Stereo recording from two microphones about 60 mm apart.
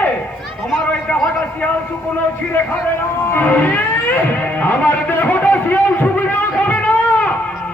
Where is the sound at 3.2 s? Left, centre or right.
Left.